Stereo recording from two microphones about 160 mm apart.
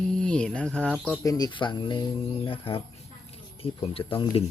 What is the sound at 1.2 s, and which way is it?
Speech, 25° left (ahead or behind).